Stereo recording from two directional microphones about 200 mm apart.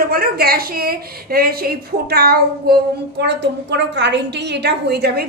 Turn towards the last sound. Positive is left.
turn(degrees=-55)  # may be behind; listen again after turning